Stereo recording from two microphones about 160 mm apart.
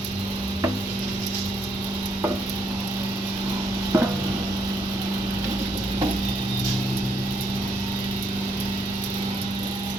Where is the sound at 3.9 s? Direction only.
15° right (ahead or behind).